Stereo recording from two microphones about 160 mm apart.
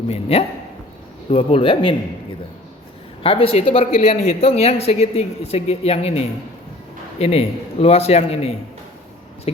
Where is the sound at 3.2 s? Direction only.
35° left (ahead or behind).